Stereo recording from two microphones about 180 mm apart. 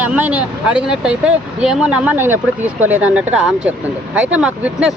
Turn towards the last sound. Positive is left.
turn(degrees=-5)  # may be behind; listen again after turning